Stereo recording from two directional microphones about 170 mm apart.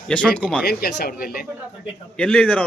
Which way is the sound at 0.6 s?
65° left (ahead or behind).